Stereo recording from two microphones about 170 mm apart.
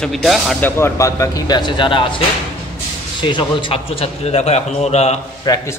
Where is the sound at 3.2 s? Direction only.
30° left (ahead or behind).